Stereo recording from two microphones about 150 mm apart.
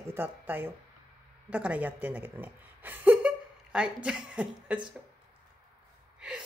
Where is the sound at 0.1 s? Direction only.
15° right (ahead or behind).